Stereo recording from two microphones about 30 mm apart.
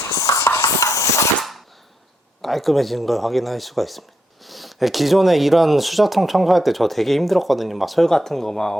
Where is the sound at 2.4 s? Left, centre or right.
Centre.